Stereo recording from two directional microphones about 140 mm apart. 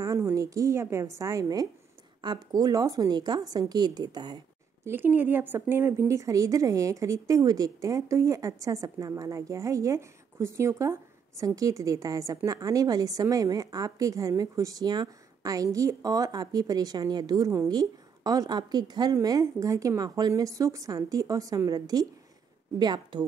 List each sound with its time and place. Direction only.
0.0 s a woman's voice: 25° right (ahead or behind)
4.8 s a woman's voice: 15° right (ahead or behind); by 23.2 s 30° right (ahead or behind)